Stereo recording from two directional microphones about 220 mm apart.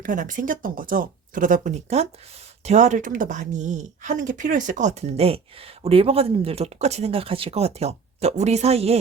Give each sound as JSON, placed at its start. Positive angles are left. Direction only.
{"t": 0.0, "sound": "speech", "side_deg": -35}